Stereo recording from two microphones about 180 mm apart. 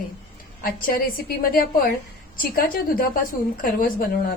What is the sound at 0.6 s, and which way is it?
A woman's voice, 55° left (ahead or behind).